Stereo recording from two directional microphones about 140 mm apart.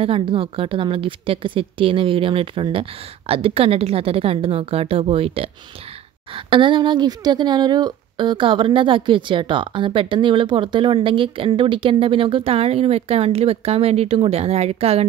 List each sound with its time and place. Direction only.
0.0 s speech: 40° right (ahead or behind)